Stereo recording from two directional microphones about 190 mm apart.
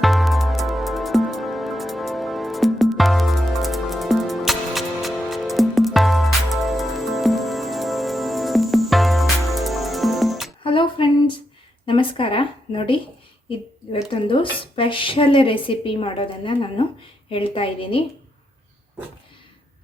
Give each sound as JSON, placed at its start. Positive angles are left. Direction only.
{"t": 0.0, "sound": "music", "side_deg": 0}
{"t": 10.6, "sound": "music", "side_deg": 25}
{"t": 11.9, "sound": "a sound", "side_deg": 25}
{"t": 13.5, "sound": "a woman's voice", "side_deg": 30}